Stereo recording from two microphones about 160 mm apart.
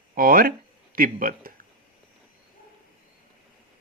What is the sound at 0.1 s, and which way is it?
Speech, 65° right (ahead or behind).